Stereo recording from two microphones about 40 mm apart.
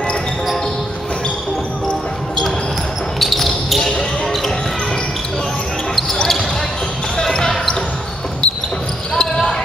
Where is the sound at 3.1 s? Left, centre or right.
Centre.